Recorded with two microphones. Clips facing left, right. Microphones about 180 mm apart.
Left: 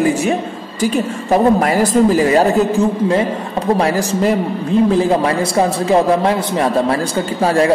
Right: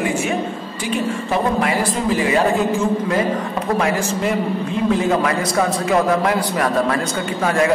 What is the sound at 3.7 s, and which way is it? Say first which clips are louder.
A man's voice: left 3 dB; 35° left (ahead or behind).